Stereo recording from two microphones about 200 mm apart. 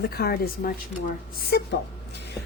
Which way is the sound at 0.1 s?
50° left (ahead or behind).